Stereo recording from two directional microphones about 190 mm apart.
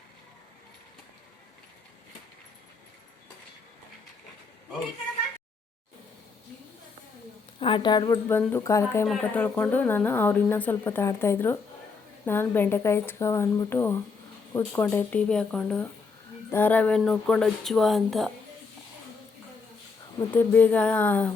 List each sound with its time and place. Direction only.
7.6 s a woman's voice: 25° left (ahead or behind); by 18.3 s centre (ahead or behind)
20.3 s speech: 10° left (ahead or behind)